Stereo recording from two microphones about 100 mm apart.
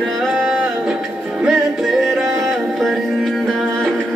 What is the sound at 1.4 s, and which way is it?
Music, 5° right (ahead or behind).